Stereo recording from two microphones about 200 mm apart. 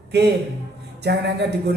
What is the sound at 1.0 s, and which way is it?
Speech, 55° right (ahead or behind).